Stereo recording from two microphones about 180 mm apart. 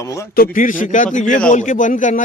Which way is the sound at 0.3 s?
50° left (ahead or behind).